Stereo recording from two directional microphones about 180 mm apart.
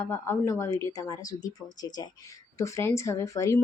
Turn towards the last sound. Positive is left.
turn(degrees=15)  # may be behind; listen again after turning